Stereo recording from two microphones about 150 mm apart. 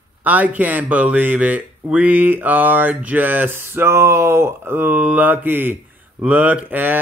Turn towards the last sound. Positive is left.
turn(degrees=-10)  # may be behind; listen again after turning